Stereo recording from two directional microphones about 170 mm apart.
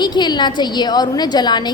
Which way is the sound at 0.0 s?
25° left (ahead or behind).